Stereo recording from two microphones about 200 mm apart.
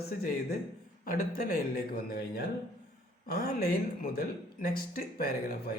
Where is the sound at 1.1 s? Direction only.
50° left (ahead or behind).